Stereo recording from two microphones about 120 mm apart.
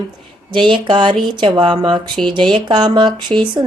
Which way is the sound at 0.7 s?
40° right (ahead or behind).